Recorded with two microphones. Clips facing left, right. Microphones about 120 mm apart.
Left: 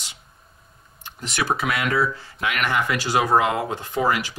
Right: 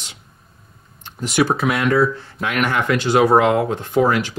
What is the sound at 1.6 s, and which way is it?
Speech, 25° right (ahead or behind).